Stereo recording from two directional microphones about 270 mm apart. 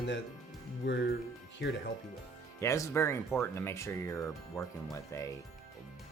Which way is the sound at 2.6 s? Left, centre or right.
Centre.